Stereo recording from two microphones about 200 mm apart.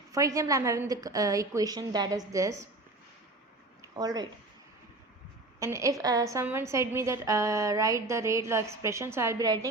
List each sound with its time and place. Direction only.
0.1 s a woman's voice: 15° right (ahead or behind)
3.8 s a sound: 20° right (ahead or behind)
5.5 s a woman's voice: 15° right (ahead or behind)